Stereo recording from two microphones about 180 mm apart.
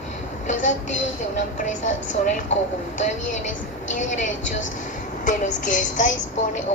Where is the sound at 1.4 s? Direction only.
45° left (ahead or behind).